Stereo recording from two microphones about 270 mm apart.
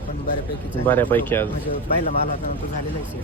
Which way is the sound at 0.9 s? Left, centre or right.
Centre.